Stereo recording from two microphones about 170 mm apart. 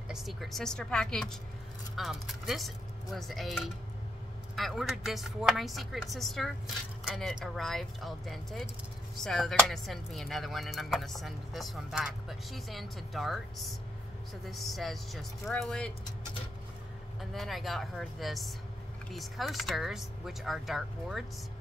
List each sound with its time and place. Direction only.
0.1 s speech: centre (ahead or behind)
17.2 s speech: centre (ahead or behind)